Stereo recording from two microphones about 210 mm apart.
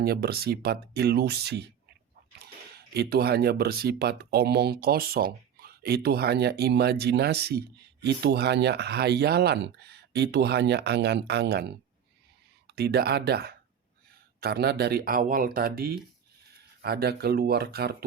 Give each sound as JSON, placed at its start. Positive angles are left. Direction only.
{"t": 0.0, "sound": "speech", "side_deg": -50}
{"t": 2.9, "sound": "speech", "side_deg": -50}
{"t": 12.7, "sound": "speech", "side_deg": -50}